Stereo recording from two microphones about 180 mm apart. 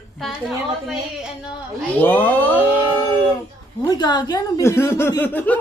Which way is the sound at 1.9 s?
10° left (ahead or behind).